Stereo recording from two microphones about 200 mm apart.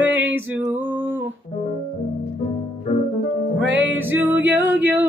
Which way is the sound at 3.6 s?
65° right (ahead or behind).